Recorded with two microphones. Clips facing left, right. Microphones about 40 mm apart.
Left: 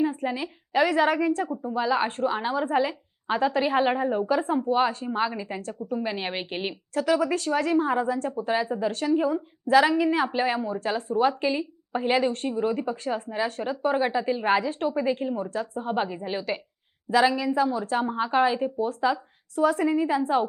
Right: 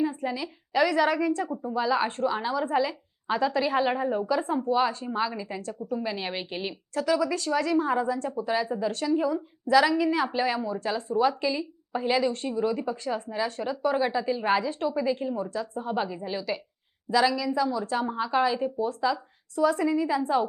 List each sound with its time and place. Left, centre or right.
0.0 s a woman's voice: left
1.7 s a woman's voice: left
5.0 s a woman's voice: left
6.9 s a woman's voice: left
12.5 s a woman's voice: left
14.6 s a woman's voice: left
17.1 s a woman's voice: left